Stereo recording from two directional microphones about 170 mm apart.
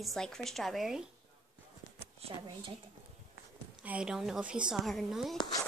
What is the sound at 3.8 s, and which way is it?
Speech, 5° right (ahead or behind).